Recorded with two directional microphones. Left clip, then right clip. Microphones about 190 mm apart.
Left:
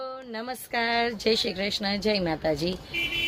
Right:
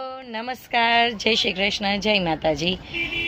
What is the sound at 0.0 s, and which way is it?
A woman's voice, 20° left (ahead or behind).